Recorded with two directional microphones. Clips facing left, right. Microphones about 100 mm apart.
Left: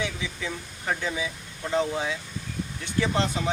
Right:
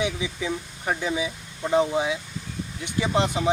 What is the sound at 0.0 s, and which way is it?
Speech, 15° right (ahead or behind).